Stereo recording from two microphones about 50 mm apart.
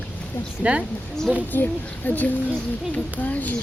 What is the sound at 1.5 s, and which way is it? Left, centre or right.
A woman's voice, left.